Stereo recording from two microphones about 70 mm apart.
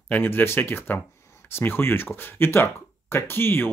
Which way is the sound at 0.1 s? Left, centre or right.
Left.